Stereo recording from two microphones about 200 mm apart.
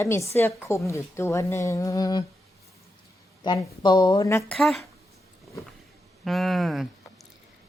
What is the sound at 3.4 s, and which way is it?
Speech, 20° left (ahead or behind).